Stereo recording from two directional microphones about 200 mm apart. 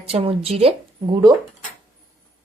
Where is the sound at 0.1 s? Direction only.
30° right (ahead or behind).